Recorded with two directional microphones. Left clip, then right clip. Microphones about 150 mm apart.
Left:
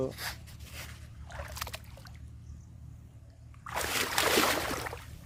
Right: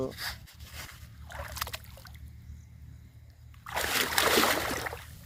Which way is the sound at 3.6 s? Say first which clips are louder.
Right 3 dB; 75° right (ahead or behind).